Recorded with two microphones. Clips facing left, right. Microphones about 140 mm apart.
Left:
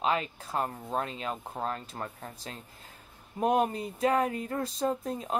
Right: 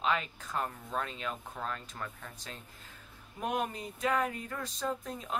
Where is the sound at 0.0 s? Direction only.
35° left (ahead or behind).